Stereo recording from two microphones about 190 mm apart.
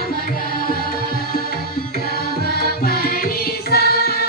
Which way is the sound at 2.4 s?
55° left (ahead or behind).